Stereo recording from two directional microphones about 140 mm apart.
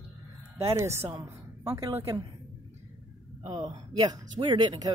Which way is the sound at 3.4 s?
35° right (ahead or behind).